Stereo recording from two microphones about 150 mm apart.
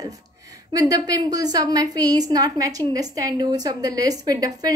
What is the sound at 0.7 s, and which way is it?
A woman's voice, 25° right (ahead or behind).